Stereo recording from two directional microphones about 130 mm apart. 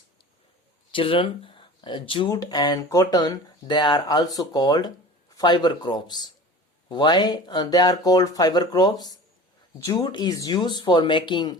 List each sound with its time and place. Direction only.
0.9 s speech: 45° left (ahead or behind)
2.3 s speech: 30° left (ahead or behind)